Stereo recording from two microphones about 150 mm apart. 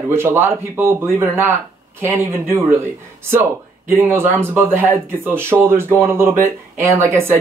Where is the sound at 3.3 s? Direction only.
15° right (ahead or behind).